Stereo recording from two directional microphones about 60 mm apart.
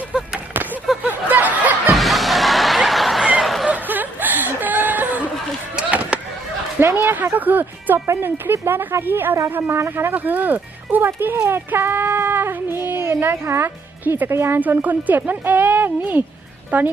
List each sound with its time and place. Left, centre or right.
0.2 s a sound: right
1.0 s snicker: right
2.0 s music: centre
3.4 s a sound: centre
3.7 s chuckle: right
5.7 s chop: right
6.7 s a sound: right
8.0 s speech: right
14.0 s speech: right
14.3 s a woman's voice: right
14.6 s speech: right